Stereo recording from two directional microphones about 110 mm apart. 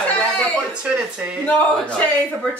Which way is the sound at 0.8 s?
10° right (ahead or behind).